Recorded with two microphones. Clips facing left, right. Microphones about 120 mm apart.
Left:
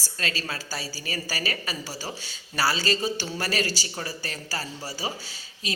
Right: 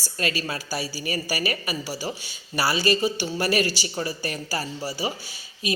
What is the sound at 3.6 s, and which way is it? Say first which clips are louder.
Speech: right 3 dB; 40° left (ahead or behind).